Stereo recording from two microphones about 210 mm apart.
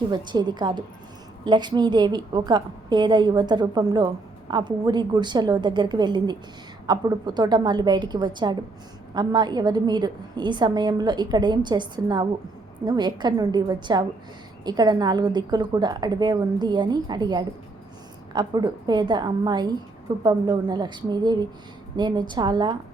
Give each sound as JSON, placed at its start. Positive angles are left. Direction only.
{"t": 0.1, "sound": "a woman's voice", "side_deg": -20}